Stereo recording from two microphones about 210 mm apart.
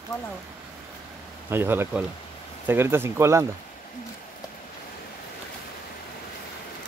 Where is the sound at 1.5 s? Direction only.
10° right (ahead or behind).